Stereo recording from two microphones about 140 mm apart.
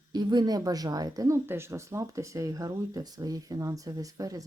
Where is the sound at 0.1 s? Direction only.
30° right (ahead or behind).